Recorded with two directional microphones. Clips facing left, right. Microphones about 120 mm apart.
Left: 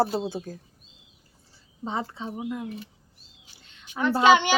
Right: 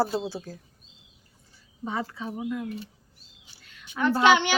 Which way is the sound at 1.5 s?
25° left (ahead or behind).